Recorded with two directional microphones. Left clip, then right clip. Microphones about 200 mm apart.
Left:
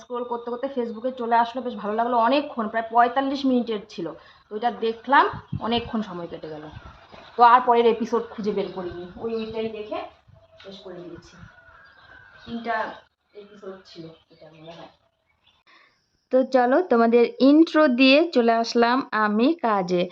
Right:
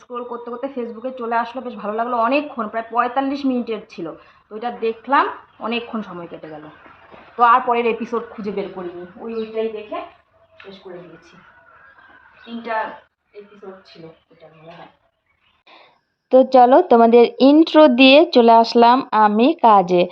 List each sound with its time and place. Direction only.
0.1 s a woman's voice: 15° left (ahead or behind)
7.3 s a woman's voice: 15° left (ahead or behind)
7.7 s a woman's voice: 5° left (ahead or behind)
16.3 s speech: 10° right (ahead or behind)